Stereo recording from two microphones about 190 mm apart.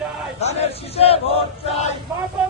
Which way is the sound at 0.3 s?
35° left (ahead or behind).